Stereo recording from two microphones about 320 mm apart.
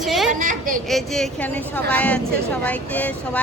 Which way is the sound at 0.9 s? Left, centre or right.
Centre.